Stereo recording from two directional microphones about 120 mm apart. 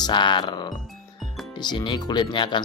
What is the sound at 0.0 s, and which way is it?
Speech, 40° left (ahead or behind).